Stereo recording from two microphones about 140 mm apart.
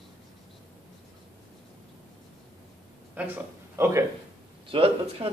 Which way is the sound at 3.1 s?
15° right (ahead or behind).